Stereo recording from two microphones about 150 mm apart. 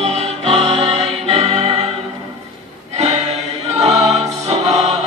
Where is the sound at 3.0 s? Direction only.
45° right (ahead or behind).